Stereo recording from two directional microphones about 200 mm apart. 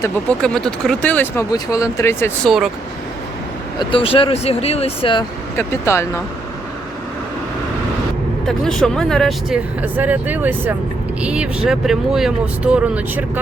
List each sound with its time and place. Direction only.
0.0 s speech: 5° left (ahead or behind)
3.8 s speech: 25° left (ahead or behind)
5.5 s speech: 15° left (ahead or behind)
8.4 s speech: 5° left (ahead or behind)
9.8 s speech: 10° right (ahead or behind)